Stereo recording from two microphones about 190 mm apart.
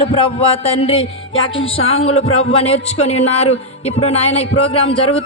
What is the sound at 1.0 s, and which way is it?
Music, 90° left.